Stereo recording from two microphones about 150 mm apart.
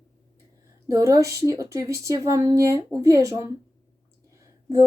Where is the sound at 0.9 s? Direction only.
20° right (ahead or behind).